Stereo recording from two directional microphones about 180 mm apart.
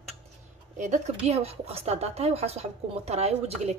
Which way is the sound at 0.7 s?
40° right (ahead or behind).